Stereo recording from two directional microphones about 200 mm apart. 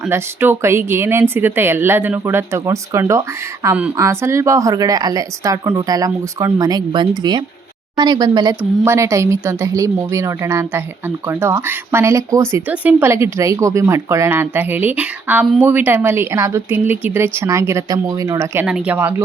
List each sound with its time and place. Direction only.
0.1 s speech: 10° right (ahead or behind)